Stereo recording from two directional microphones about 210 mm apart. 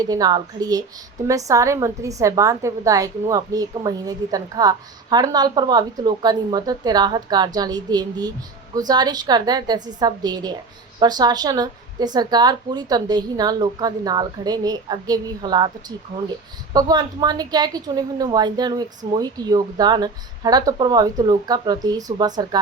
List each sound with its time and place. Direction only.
0.0 s a woman's voice: 20° right (ahead or behind)
16.7 s a woman's voice: 20° right (ahead or behind)